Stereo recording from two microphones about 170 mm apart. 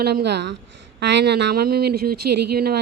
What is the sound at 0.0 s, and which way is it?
Speech, 70° right (ahead or behind).